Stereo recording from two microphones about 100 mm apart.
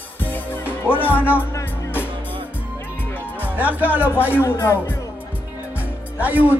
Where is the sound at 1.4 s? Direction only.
20° left (ahead or behind).